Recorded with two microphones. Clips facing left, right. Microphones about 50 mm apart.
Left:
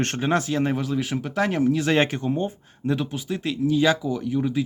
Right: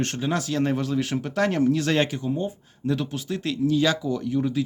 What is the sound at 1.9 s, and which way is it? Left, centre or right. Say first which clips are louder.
Speech: left 2 dB; left.